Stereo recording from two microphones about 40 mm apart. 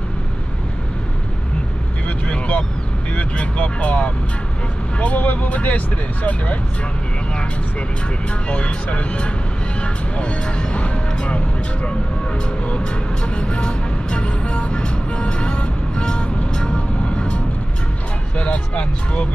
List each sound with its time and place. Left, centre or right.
2.0 s vehicle: left
3.2 s speech: left
8.5 s speech: left
12.6 s vehicle: left
18.4 s speech: left